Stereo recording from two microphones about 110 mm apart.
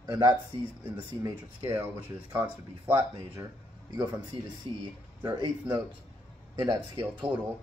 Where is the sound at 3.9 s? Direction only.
40° right (ahead or behind).